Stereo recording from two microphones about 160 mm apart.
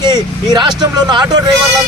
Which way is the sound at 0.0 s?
25° right (ahead or behind).